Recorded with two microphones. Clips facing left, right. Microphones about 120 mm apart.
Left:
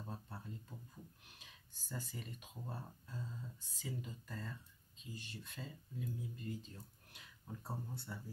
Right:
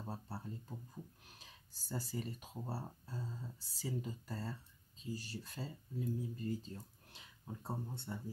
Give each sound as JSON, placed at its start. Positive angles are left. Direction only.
{"t": 0.0, "sound": "speech", "side_deg": -35}